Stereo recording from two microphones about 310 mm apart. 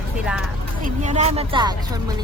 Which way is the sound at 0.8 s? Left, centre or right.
Right.